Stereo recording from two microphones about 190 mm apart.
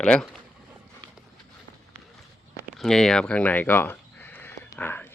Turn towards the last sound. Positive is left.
turn(degrees=10)  # may be behind; listen again after turning